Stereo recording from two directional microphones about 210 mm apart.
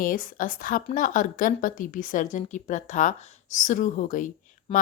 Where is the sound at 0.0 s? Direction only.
40° left (ahead or behind).